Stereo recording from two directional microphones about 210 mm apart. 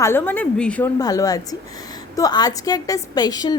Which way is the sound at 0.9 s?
15° left (ahead or behind).